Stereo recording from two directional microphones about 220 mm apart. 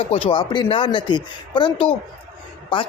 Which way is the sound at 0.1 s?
25° left (ahead or behind).